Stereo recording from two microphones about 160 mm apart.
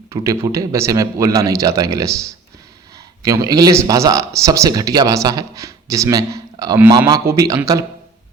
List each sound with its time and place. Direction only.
0.1 s a man's voice: 20° right (ahead or behind)